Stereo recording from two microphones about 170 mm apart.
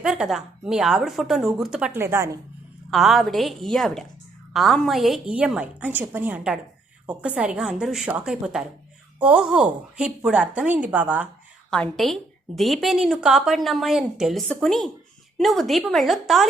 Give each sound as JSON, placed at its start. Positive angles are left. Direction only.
{"t": 0.0, "sound": "a woman's voice", "side_deg": -5}
{"t": 1.9, "sound": "a woman's voice", "side_deg": -15}
{"t": 2.9, "sound": "a woman's voice", "side_deg": 0}
{"t": 11.7, "sound": "a woman's voice", "side_deg": 5}